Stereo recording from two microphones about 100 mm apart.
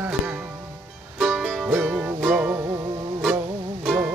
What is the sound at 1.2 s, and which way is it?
Music, 5° right (ahead or behind).